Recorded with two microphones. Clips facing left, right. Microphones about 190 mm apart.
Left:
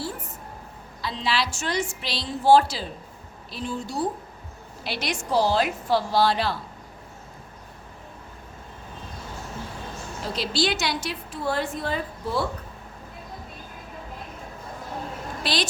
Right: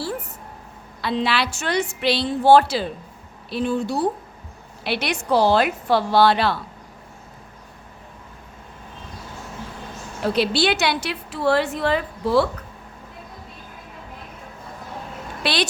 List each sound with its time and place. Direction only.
1.0 s a woman's voice: 65° right (ahead or behind)
10.2 s a woman's voice: 65° right (ahead or behind)
15.4 s a woman's voice: 65° right (ahead or behind)